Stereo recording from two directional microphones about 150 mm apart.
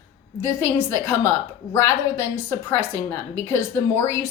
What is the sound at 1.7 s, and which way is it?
A woman's voice, 20° left (ahead or behind).